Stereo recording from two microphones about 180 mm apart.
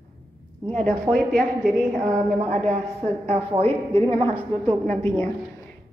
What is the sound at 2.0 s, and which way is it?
A woman's voice, 40° right (ahead or behind).